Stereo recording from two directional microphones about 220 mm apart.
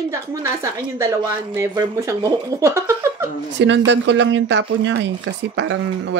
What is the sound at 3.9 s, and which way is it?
Speech, 55° right (ahead or behind).